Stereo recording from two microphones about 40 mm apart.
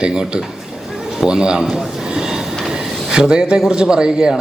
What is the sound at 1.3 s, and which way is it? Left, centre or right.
Speech, centre.